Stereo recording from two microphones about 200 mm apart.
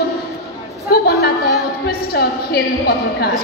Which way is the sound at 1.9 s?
50° left (ahead or behind).